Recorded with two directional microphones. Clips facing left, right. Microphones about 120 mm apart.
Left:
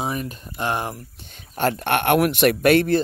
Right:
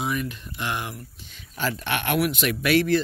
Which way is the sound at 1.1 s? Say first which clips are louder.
Left 6 dB; 50° left (ahead or behind).